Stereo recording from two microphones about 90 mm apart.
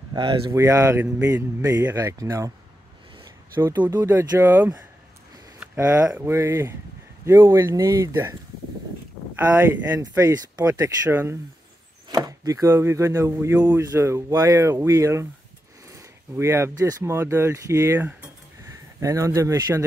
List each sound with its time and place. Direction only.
0.1 s speech: 65° right (ahead or behind)
0.5 s speech: 35° right (ahead or behind)
3.5 s speech: 25° right (ahead or behind)
6.2 s speech: 30° right (ahead or behind); by 8.2 s 45° right (ahead or behind)
9.4 s speech: 20° right (ahead or behind)
9.9 s speech: 40° right (ahead or behind)
12.1 s chopping: 45° right (ahead or behind)
12.7 s speech: 30° right (ahead or behind)
15.9 s a sound: 30° right (ahead or behind)
16.7 s speech: 35° right (ahead or behind)